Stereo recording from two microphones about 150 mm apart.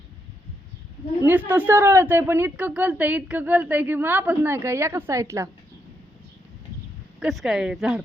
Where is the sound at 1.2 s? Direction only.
10° right (ahead or behind).